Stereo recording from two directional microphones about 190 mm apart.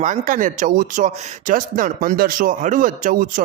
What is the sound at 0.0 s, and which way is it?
Speech, 40° right (ahead or behind).